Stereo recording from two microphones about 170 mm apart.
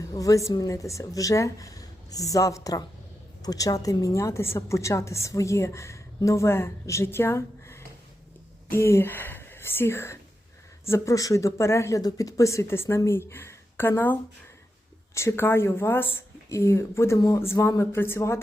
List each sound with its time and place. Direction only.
0.0 s a woman's voice: 20° left (ahead or behind)